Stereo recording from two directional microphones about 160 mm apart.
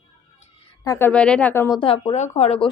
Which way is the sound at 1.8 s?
35° left (ahead or behind).